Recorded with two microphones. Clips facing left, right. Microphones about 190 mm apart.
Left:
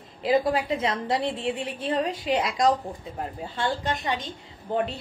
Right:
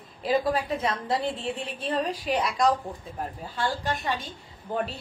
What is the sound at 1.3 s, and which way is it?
Speech, 90° left.